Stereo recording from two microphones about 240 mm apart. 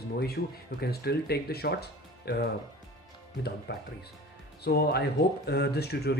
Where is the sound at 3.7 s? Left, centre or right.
Left.